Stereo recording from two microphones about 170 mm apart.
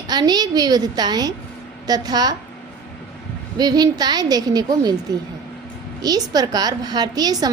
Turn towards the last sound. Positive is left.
turn(degrees=-20)  # may be behind; listen again after turning